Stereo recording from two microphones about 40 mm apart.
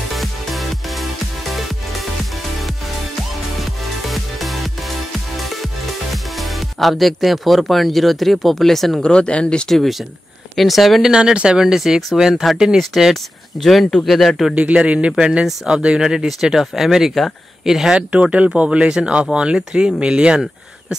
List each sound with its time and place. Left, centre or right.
0.1 s music: centre
4.1 s music: centre
6.3 s speech: centre
9.0 s speech: left
9.7 s speech: centre
11.0 s speech: centre
11.6 s speech: centre
14.5 s speech: right; by 17.9 s centre
17.9 s speech: right